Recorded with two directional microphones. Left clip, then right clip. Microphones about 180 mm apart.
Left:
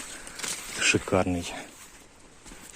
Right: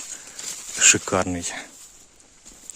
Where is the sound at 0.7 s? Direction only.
30° right (ahead or behind).